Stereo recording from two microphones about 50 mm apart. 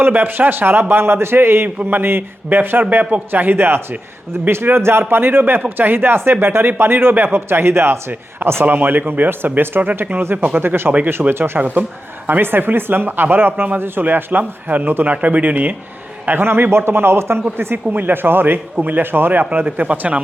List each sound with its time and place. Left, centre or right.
0.0 s speech: right
1.6 s a man's voice: right
8.6 s speech: right
10.6 s speech: right
11.6 s speech: right
12.3 s speech: right
16.4 s speech: right
17.9 s speech: right